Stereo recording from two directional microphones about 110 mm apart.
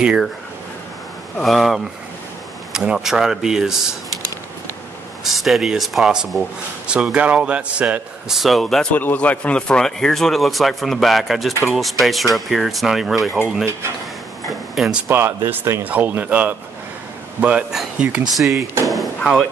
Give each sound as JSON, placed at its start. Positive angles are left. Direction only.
{"t": 0.0, "sound": "a man's voice", "side_deg": -5}
{"t": 1.4, "sound": "speech", "side_deg": 0}
{"t": 5.2, "sound": "a man's voice", "side_deg": 0}
{"t": 8.9, "sound": "speech", "side_deg": 15}
{"t": 15.0, "sound": "a man's voice", "side_deg": -20}
{"t": 18.9, "sound": "chop", "side_deg": 0}